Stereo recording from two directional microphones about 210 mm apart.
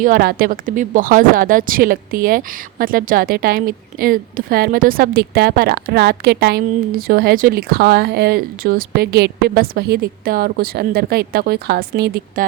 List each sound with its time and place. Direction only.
0.0 s speech: 45° right (ahead or behind)